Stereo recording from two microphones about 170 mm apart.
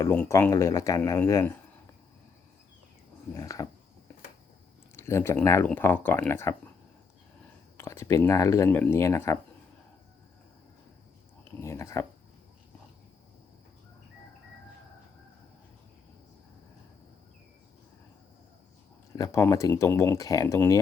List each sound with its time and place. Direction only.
0.0 s speech: 15° left (ahead or behind)
3.3 s a sound: 20° left (ahead or behind)
4.9 s speech: 15° left (ahead or behind)
7.8 s speech: 15° left (ahead or behind)
11.6 s speech: 15° left (ahead or behind)
19.1 s speech: 20° left (ahead or behind)